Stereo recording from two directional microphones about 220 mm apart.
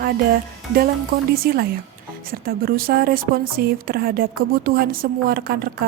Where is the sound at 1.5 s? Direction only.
45° right (ahead or behind).